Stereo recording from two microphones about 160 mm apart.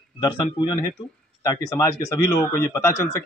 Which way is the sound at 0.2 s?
25° left (ahead or behind).